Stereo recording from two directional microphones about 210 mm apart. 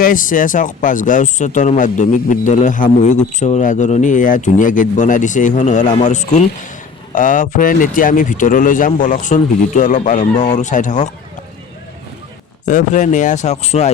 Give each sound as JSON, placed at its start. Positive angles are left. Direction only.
{"t": 0.0, "sound": "speech", "side_deg": 40}
{"t": 12.6, "sound": "speech", "side_deg": 35}